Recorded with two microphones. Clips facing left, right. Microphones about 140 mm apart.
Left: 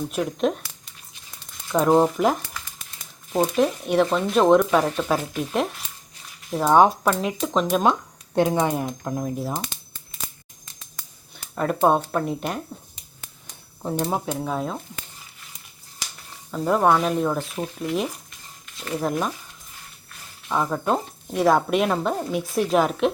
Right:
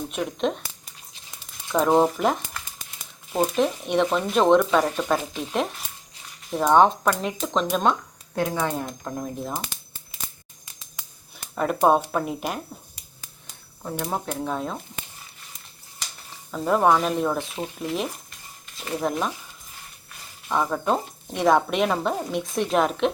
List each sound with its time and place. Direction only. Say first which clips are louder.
0.1 s speech: left 2 dB; centre (ahead or behind)
1.7 s speech: left 1 dB; centre (ahead or behind)
8.4 s speech: left 5 dB; 20° left (ahead or behind)
8.9 s speech: left 4 dB; centre (ahead or behind)
11.3 s speech: left 1 dB; centre (ahead or behind)
14.3 s speech: left 1 dB; 5° left (ahead or behind)
16.5 s speech: even; centre (ahead or behind)
20.5 s speech: even; centre (ahead or behind)